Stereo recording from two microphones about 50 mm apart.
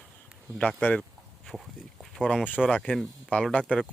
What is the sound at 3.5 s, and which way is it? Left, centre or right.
Speech, left.